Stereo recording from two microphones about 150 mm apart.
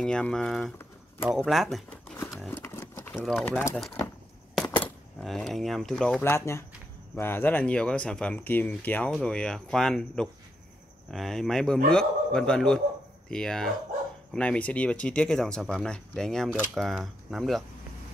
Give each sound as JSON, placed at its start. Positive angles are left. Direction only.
{"t": 0.0, "sound": "speech", "side_deg": 5}
{"t": 2.5, "sound": "sewing machine", "side_deg": 15}
{"t": 3.4, "sound": "speech", "side_deg": 10}
{"t": 5.2, "sound": "speech", "side_deg": 0}
{"t": 6.2, "sound": "speech", "side_deg": 15}